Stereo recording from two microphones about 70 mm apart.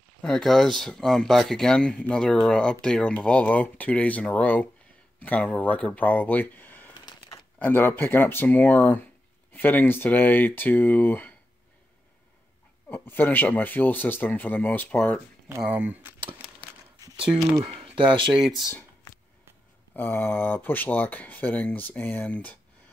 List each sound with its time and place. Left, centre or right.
0.2 s speech: centre; by 11.3 s left
12.9 s speech: left
15.7 s speech: right
17.2 s speech: centre
20.0 s speech: left